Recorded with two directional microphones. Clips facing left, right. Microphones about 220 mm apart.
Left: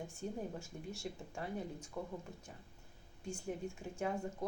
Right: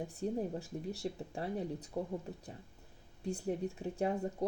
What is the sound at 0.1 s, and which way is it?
Speech, 35° right (ahead or behind).